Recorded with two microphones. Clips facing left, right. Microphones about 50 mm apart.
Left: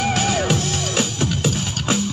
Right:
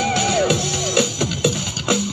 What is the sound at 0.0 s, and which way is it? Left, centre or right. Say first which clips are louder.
Music: right 2 dB; left.